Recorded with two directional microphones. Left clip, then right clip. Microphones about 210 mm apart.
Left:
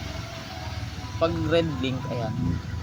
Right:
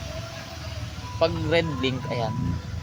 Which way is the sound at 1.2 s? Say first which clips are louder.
Right 1 dB; 25° right (ahead or behind).